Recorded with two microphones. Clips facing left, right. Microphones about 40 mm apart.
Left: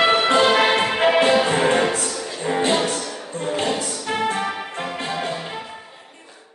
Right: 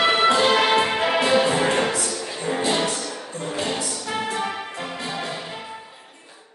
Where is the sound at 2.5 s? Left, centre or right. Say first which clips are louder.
Left 3 dB; left.